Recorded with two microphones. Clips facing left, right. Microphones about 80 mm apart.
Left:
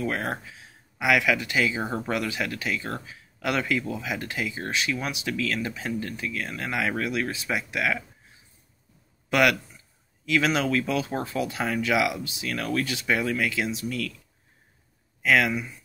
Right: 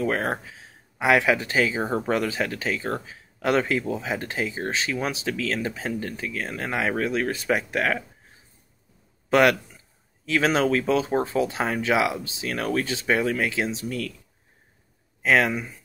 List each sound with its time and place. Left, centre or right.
0.0 s speech: right
9.3 s speech: right
15.2 s speech: right